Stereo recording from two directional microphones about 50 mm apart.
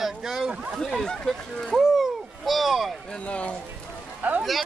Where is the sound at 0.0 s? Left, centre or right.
Centre.